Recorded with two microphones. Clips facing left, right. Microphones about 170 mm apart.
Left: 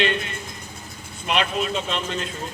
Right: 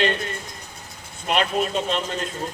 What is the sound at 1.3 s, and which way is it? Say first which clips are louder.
Speech: right 1 dB; 45° right (ahead or behind).